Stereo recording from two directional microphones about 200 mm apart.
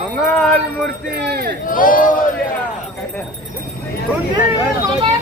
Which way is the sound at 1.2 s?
50° right (ahead or behind).